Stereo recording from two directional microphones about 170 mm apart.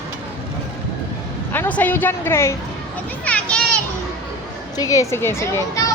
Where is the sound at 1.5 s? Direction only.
10° left (ahead or behind).